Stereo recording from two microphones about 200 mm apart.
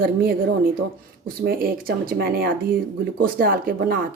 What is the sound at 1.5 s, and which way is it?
Speech, 50° right (ahead or behind).